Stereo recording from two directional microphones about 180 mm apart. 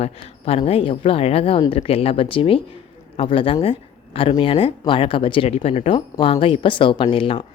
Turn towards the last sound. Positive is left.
turn(degrees=30)  # may be behind; listen again after turning